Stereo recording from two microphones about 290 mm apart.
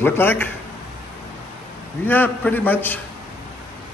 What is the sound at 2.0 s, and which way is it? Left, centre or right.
A man's voice, centre.